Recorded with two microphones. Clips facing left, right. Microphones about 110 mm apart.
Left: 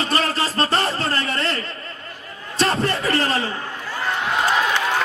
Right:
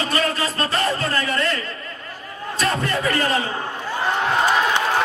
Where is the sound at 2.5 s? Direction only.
30° left (ahead or behind).